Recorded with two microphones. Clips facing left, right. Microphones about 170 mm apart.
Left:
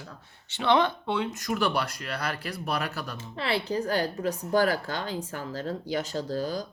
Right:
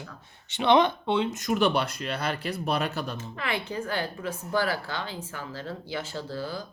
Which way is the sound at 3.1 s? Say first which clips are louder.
Left 2 dB; 30° left (ahead or behind).